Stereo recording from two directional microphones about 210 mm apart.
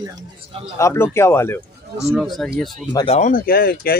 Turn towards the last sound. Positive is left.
turn(degrees=45)  # may be behind; listen again after turning